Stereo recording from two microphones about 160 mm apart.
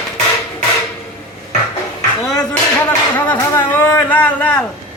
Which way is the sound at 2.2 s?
5° left (ahead or behind).